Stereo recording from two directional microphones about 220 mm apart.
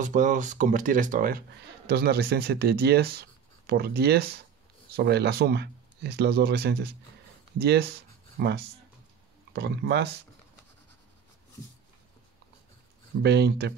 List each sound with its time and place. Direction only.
0.0 s speech: 35° right (ahead or behind)
13.2 s speech: 50° right (ahead or behind)